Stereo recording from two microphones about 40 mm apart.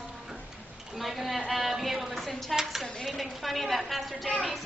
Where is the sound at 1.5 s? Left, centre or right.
Centre.